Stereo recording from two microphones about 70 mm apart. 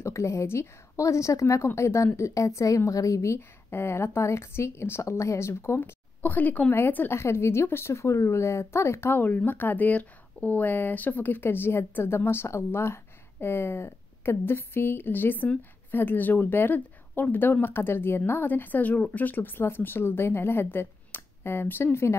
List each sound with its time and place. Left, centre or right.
0.0 s a woman's voice: left
5.9 s a woman's voice: left